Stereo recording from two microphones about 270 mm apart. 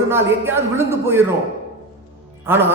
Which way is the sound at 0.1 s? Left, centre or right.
Centre.